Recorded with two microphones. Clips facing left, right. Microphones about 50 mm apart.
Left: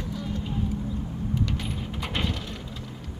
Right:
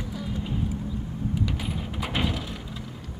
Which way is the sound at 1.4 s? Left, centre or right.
Centre.